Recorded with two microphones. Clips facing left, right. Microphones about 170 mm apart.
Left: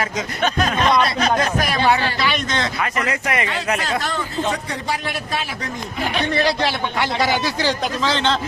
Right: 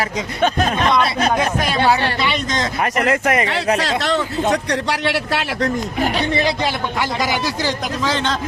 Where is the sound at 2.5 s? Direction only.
40° right (ahead or behind).